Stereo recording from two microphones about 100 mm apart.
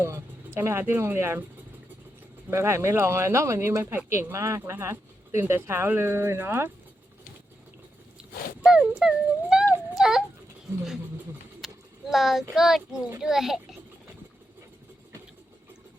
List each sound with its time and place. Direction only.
0.0 s speech: 25° right (ahead or behind)
2.5 s speech: 25° right (ahead or behind)
8.6 s speech: 5° right (ahead or behind)
11.6 s a child's voice: centre (ahead or behind)